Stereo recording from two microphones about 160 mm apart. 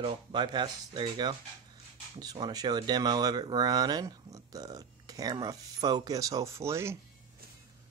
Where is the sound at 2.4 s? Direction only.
25° right (ahead or behind).